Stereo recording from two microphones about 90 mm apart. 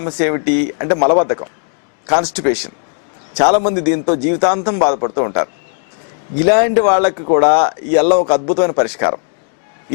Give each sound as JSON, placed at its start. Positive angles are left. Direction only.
{"t": 0.0, "sound": "speech", "side_deg": 15}